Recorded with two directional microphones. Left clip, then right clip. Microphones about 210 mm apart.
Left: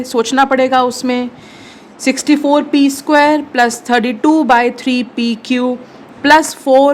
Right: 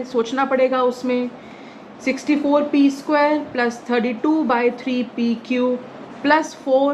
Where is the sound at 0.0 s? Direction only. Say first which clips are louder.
Left 8 dB; 55° left (ahead or behind).